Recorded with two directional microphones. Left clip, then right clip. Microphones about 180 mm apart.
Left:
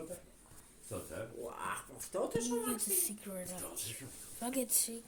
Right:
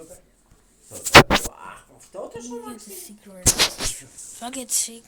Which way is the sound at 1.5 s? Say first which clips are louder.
Right 1 dB; 40° left (ahead or behind).